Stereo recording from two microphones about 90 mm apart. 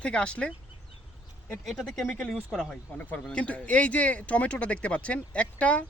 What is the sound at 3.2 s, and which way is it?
Speech, 15° left (ahead or behind).